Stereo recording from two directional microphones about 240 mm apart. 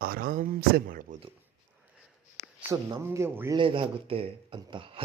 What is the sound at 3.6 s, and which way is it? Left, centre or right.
Speech, right.